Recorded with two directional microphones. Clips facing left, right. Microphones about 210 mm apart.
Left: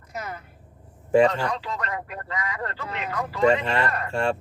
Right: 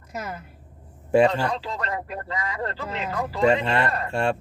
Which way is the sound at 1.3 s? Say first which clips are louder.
Right 2 dB; 30° right (ahead or behind).